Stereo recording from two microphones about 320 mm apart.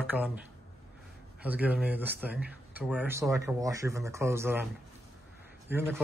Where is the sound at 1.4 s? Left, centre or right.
Centre.